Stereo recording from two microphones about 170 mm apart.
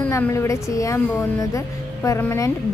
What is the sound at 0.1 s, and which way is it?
Speech, 15° left (ahead or behind).